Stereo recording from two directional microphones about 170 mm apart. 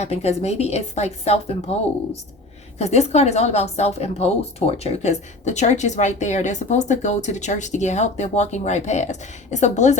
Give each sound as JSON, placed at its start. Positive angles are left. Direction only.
{"t": 0.0, "sound": "a woman's voice", "side_deg": 40}
{"t": 2.7, "sound": "a woman's voice", "side_deg": 40}